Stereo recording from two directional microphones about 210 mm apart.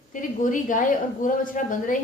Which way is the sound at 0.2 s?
40° left (ahead or behind).